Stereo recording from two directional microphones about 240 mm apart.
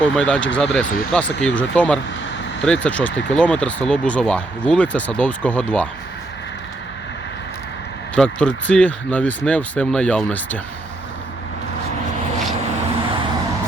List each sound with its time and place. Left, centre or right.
0.0 s speech: centre
8.1 s speech: centre